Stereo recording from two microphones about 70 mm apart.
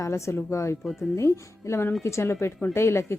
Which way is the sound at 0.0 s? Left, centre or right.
Left.